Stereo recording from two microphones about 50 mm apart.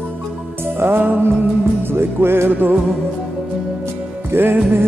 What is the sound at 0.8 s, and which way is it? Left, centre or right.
Music, right.